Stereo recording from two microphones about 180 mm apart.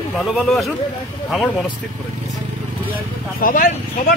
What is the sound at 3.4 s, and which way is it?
Speech, 50° left (ahead or behind).